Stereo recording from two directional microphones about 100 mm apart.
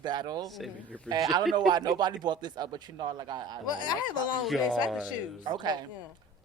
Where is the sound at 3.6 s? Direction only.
45° left (ahead or behind).